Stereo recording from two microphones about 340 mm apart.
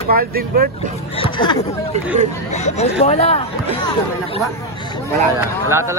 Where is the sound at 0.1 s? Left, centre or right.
Right.